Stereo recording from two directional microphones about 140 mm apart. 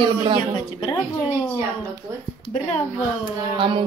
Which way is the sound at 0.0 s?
35° right (ahead or behind).